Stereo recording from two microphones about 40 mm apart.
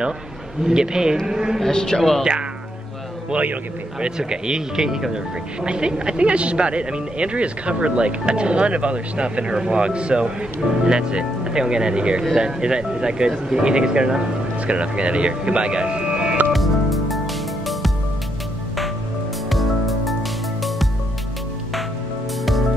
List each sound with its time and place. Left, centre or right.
0.6 s speech: centre
1.6 s a man's voice: centre
4.0 s speech: centre
16.5 s music: centre
19.5 s music: centre
22.4 s music: centre